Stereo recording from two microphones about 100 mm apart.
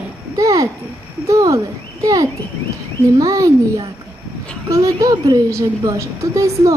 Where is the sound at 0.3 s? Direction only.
35° right (ahead or behind).